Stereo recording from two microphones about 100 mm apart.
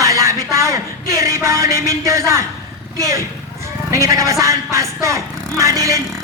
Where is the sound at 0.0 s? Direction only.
30° right (ahead or behind).